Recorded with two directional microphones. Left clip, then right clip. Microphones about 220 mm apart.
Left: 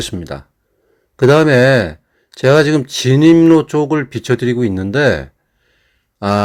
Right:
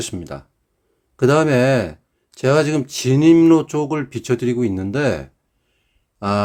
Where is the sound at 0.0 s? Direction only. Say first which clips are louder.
Left 5 dB; 15° left (ahead or behind).